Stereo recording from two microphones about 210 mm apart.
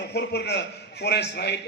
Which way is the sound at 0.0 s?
50° left (ahead or behind).